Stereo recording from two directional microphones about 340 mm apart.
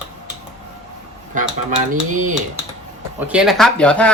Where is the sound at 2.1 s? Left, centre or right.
Right.